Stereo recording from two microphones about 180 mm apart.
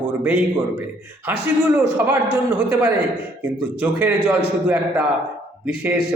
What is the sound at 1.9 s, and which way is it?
Speech, 10° right (ahead or behind).